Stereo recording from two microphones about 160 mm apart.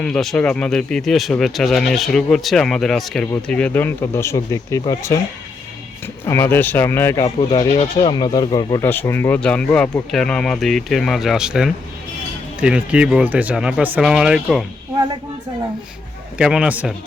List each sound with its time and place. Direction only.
0.0 s speech: 5° left (ahead or behind); by 5.2 s 20° left (ahead or behind)
6.2 s speech: 15° left (ahead or behind)
7.8 s speech: 35° left (ahead or behind)
8.8 s speech: 15° left (ahead or behind); by 14.6 s 5° right (ahead or behind)
16.4 s speech: 5° right (ahead or behind)